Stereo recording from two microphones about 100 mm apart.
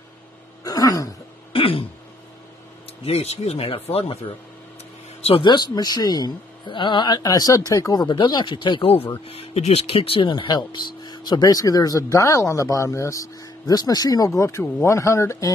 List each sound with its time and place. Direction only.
0.7 s throat clearing: 40° left (ahead or behind)
1.5 s throat clearing: 65° left (ahead or behind)
3.1 s speech: 90° left
5.4 s speech: 45° left (ahead or behind)
8.1 s speech: 50° left (ahead or behind); by 9.1 s 70° left (ahead or behind)
9.2 s speech: 80° left; by 15.5 s 30° left (ahead or behind)